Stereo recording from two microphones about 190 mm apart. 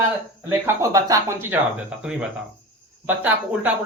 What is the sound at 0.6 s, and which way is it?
Speech, 15° right (ahead or behind).